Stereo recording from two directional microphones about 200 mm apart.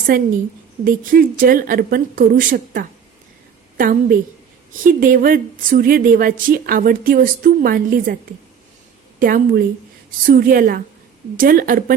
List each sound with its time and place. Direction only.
0.9 s a woman's voice: 45° right (ahead or behind)
9.1 s a woman's voice: 45° right (ahead or behind)